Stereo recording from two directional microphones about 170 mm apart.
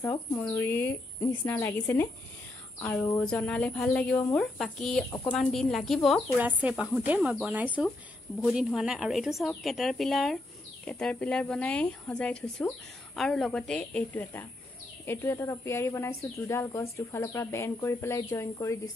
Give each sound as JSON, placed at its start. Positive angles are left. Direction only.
{"t": 0.0, "sound": "speech", "side_deg": 15}
{"t": 6.3, "sound": "speech", "side_deg": -10}